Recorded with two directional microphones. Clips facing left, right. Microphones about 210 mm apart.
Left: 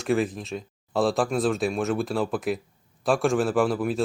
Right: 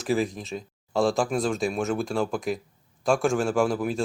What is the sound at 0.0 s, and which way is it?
Speech, centre (ahead or behind).